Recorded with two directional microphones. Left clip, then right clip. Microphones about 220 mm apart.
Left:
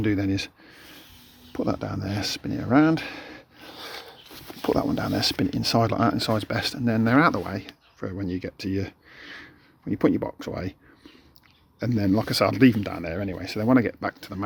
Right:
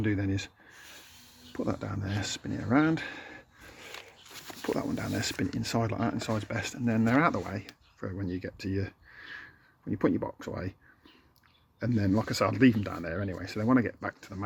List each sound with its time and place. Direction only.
0.0 s speech: 10° left (ahead or behind)
1.5 s speech: 10° left (ahead or behind)
11.8 s speech: 10° left (ahead or behind)